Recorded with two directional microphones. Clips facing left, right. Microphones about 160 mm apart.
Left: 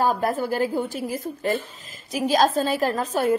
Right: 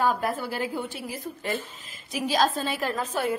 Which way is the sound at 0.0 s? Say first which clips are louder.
Left 3 dB; 45° left (ahead or behind).